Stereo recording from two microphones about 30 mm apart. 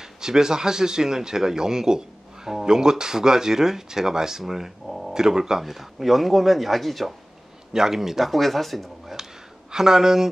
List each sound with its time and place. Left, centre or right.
0.0 s speech: centre
5.1 s speech: right
5.6 s speech: centre
7.7 s speech: centre
8.3 s speech: centre
9.7 s speech: centre